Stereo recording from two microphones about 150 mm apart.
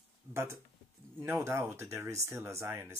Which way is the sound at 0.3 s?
15° right (ahead or behind).